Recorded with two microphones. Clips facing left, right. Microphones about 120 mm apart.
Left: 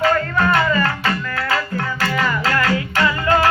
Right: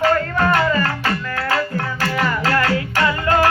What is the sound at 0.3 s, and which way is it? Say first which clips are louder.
Music: even; 45° right (ahead or behind).